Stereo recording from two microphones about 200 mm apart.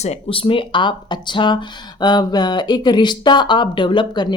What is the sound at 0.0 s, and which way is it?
Speech, 30° left (ahead or behind).